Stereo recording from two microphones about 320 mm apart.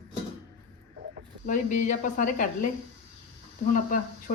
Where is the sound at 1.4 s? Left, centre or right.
Left.